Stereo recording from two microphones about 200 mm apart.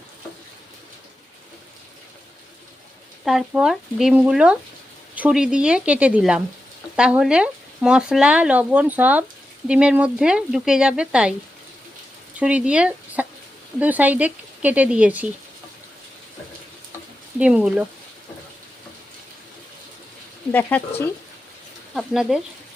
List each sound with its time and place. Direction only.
3.2 s speech: 5° right (ahead or behind)
12.4 s speech: 5° right (ahead or behind)
17.4 s speech: 5° right (ahead or behind)
20.5 s speech: 10° left (ahead or behind)